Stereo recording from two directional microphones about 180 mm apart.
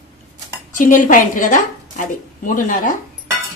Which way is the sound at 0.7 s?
45° left (ahead or behind).